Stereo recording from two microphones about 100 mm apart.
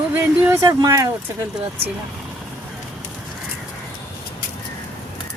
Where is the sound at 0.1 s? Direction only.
15° right (ahead or behind).